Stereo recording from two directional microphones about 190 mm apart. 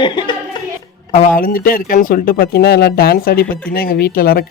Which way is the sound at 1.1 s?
40° left (ahead or behind).